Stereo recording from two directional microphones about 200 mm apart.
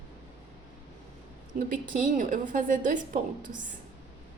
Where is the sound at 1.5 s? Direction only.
40° right (ahead or behind).